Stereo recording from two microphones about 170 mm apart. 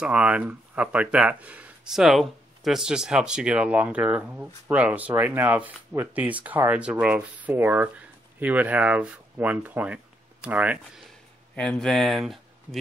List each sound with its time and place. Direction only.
0.0 s speech: 5° right (ahead or behind)
11.5 s speech: 5° left (ahead or behind)